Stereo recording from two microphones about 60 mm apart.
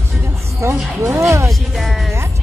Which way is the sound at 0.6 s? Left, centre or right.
Right.